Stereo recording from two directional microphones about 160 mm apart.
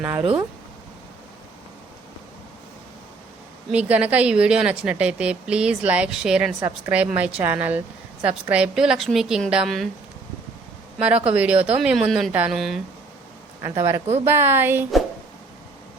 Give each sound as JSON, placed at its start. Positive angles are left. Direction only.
{"t": 0.0, "sound": "a woman's voice", "side_deg": -10}
{"t": 3.7, "sound": "a woman's voice", "side_deg": -10}
{"t": 6.6, "sound": "a woman's voice", "side_deg": -20}
{"t": 6.9, "sound": "a woman's voice", "side_deg": -10}
{"t": 10.9, "sound": "a woman's voice", "side_deg": -5}
{"t": 13.6, "sound": "a woman's voice", "side_deg": -15}